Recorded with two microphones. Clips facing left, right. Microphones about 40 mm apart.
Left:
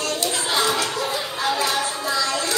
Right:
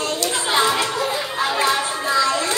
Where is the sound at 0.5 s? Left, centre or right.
Right.